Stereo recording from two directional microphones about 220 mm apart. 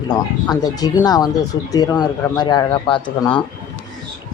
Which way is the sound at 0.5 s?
15° left (ahead or behind).